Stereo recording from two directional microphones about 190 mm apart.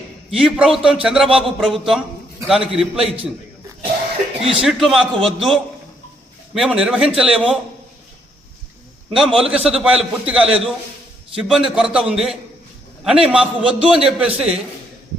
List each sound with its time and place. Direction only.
0.3 s a man's voice: 5° right (ahead or behind)
4.4 s a man's voice: 30° right (ahead or behind)
4.6 s a man's voice: centre (ahead or behind)
9.1 s a man's voice: 5° right (ahead or behind)